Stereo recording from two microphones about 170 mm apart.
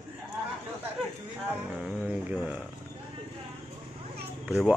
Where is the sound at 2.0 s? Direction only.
5° right (ahead or behind).